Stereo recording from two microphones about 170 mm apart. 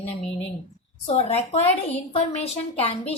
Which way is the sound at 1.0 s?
40° left (ahead or behind).